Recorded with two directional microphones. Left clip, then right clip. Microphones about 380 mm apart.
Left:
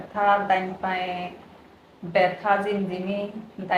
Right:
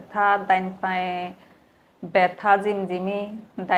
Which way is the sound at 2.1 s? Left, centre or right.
Right.